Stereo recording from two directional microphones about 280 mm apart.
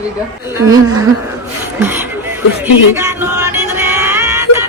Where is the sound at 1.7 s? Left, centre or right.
Centre.